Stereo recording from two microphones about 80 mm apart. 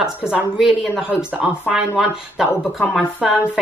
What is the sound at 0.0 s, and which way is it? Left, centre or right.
Speech, centre.